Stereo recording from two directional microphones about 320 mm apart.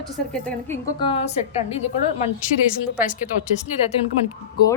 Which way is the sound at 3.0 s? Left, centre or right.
Left.